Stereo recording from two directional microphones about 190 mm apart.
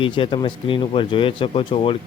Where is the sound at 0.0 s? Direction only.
25° left (ahead or behind).